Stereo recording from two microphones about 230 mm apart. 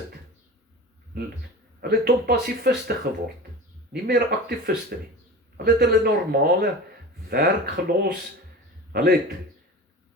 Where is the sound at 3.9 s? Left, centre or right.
Right.